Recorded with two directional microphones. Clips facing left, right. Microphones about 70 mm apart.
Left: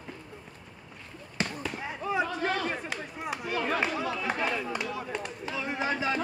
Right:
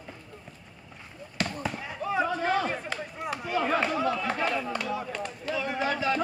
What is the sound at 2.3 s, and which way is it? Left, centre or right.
Speech, centre.